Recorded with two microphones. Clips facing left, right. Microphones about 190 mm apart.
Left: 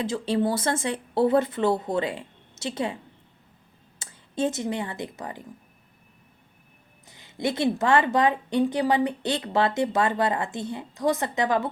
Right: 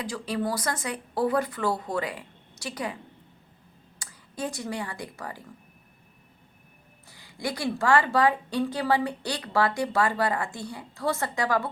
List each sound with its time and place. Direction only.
0.0 s a woman's voice: 25° left (ahead or behind)
7.1 s a woman's voice: 20° left (ahead or behind)